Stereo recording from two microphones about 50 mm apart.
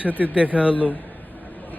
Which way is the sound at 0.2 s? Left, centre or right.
Right.